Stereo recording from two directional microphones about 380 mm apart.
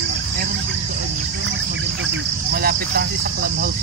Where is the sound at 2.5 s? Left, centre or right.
Right.